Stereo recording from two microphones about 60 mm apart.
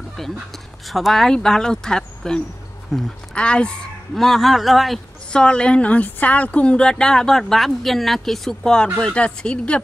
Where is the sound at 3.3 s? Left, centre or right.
Centre.